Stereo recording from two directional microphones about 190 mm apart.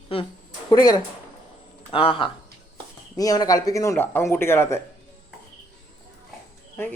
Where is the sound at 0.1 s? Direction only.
30° left (ahead or behind).